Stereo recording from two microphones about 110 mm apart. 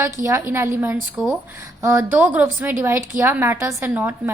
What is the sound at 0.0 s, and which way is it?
Speech, 25° right (ahead or behind).